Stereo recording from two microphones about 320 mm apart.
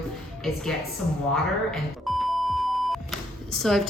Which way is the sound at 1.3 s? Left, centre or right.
Centre.